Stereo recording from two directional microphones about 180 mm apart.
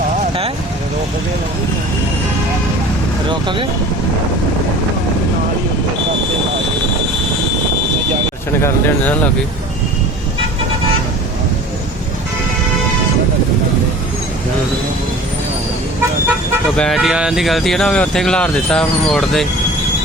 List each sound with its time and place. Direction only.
3.2 s speech: 25° right (ahead or behind)
8.6 s speech: 10° left (ahead or behind)
16.7 s speech: 5° left (ahead or behind)